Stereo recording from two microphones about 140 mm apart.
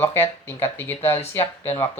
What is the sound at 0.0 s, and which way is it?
Speech, 15° left (ahead or behind).